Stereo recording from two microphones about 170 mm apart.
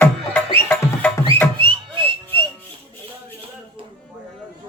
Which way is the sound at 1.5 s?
30° right (ahead or behind).